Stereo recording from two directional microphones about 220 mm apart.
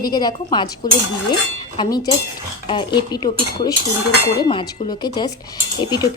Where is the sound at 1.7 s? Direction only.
20° left (ahead or behind).